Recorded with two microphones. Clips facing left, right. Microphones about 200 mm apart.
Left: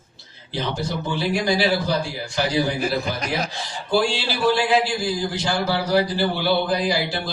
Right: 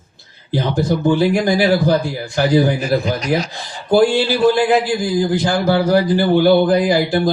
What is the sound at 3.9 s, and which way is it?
Speech, 50° right (ahead or behind).